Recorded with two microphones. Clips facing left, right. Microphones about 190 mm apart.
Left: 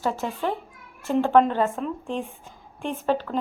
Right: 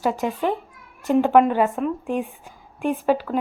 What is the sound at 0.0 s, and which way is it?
A woman's voice, 15° right (ahead or behind).